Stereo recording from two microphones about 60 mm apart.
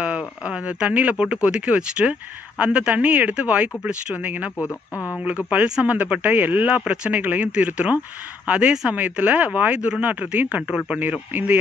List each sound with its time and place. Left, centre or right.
0.0 s speech: centre
4.6 s speech: left
5.2 s speech: right